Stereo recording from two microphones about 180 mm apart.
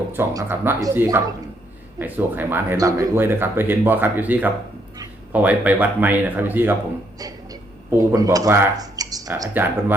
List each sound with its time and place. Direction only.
0.1 s speech: 10° right (ahead or behind)